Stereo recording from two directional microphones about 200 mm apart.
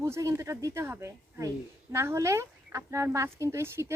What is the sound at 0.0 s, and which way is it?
Speech, 15° right (ahead or behind).